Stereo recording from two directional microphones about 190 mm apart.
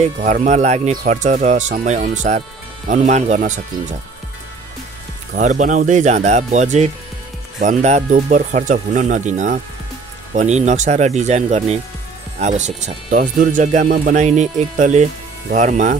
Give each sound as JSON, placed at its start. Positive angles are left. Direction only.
{"t": 0.2, "sound": "speech", "side_deg": -40}
{"t": 5.3, "sound": "speech", "side_deg": -40}